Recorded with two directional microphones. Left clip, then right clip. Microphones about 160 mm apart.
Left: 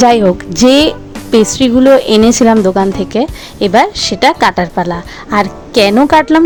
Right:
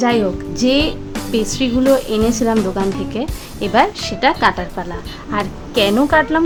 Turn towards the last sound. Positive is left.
turn(degrees=45)  # may be behind; listen again after turning